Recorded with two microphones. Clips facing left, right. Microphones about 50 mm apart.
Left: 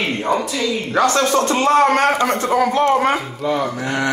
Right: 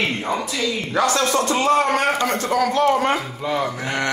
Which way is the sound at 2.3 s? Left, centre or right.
Left.